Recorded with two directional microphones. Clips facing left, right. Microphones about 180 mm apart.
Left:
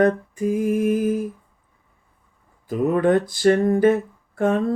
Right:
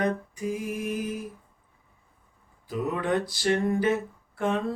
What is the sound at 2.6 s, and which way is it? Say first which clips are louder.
Mantra: left 9 dB; 50° left (ahead or behind).